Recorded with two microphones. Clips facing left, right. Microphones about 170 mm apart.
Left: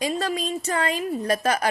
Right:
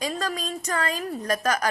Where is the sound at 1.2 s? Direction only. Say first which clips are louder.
Left 1 dB; 30° left (ahead or behind).